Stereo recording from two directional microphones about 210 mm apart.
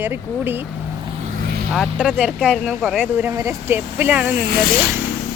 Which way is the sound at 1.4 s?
45° right (ahead or behind).